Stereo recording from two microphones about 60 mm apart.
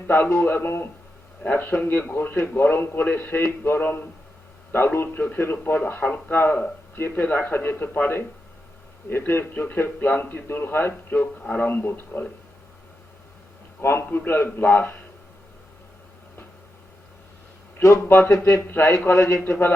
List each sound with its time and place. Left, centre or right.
0.3 s a man's voice: left
13.8 s a man's voice: left
17.8 s speech: left
18.3 s speech: left
19.0 s speech: left